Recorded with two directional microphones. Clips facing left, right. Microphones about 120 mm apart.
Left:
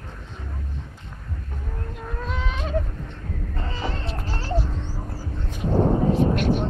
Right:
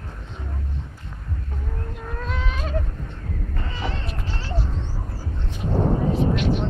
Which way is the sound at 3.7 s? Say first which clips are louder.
Left 1 dB; 35° left (ahead or behind).